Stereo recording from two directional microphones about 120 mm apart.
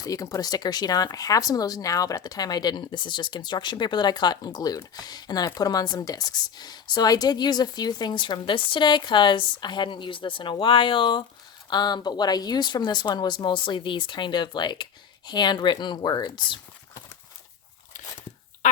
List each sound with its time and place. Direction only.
0.0 s a woman's voice: 30° left (ahead or behind)